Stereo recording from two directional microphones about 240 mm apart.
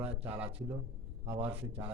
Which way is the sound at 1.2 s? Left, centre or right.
Right.